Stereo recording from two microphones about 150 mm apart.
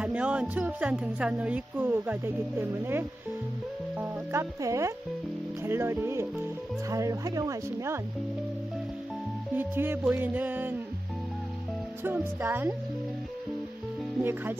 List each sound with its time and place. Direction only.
0.0 s speech: 10° right (ahead or behind)
9.5 s speech: 15° right (ahead or behind)
12.0 s speech: 15° right (ahead or behind)
14.2 s speech: 15° right (ahead or behind)